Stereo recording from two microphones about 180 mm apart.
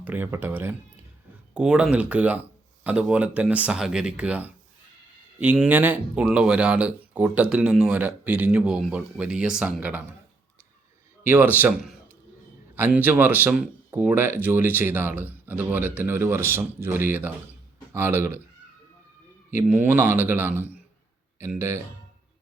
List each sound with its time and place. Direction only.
0.0 s speech: 10° right (ahead or behind)
11.2 s speech: 10° right (ahead or behind)
19.6 s speech: 10° right (ahead or behind)